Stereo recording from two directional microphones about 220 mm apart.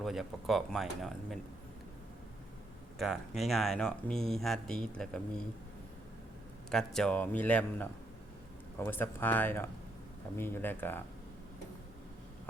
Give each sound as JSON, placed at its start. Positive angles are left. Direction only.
{"t": 0.0, "sound": "speech", "side_deg": 0}
{"t": 3.0, "sound": "speech", "side_deg": 0}
{"t": 6.7, "sound": "speech", "side_deg": 5}